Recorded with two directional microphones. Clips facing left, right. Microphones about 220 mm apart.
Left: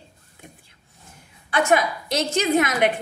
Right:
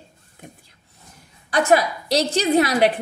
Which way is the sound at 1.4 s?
40° right (ahead or behind).